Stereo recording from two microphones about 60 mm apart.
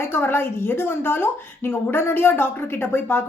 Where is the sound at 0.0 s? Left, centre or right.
Left.